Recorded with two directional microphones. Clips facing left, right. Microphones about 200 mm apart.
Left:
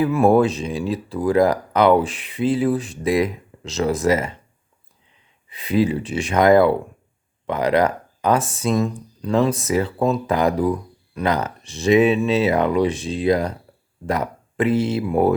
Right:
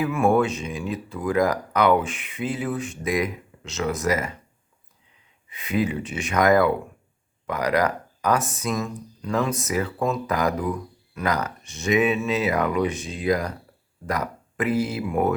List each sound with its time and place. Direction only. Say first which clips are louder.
0.0 s speech: left 5 dB; 35° left (ahead or behind)
5.5 s speech: left 5 dB; 35° left (ahead or behind)